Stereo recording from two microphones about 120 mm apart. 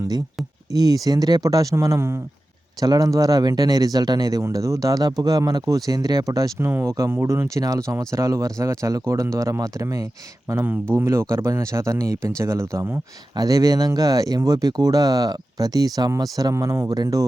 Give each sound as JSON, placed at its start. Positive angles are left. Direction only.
{"t": 0.7, "sound": "speech", "side_deg": -30}